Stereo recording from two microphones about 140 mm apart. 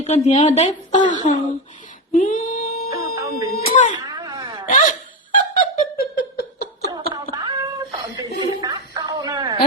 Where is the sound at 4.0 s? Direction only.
30° right (ahead or behind).